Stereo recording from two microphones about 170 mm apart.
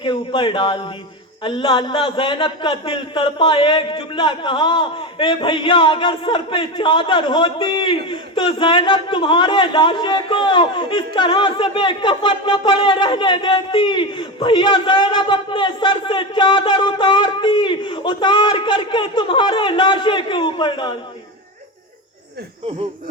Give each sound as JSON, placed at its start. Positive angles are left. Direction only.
{"t": 0.0, "sound": "a man's voice", "side_deg": 30}